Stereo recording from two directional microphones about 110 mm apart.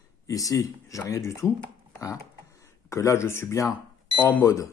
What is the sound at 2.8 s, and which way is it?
A man's voice, 25° left (ahead or behind).